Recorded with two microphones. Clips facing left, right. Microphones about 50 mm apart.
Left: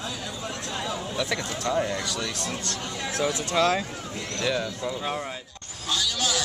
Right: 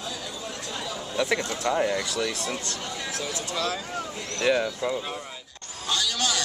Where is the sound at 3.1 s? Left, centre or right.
Left.